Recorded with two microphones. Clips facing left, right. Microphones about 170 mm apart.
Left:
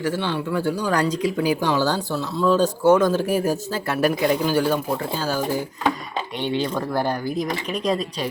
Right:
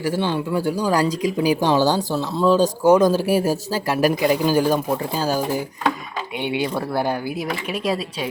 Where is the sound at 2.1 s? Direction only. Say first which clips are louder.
Right 2 dB; 25° right (ahead or behind).